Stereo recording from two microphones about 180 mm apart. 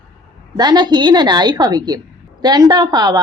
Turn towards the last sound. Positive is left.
turn(degrees=-20)  # may be behind; listen again after turning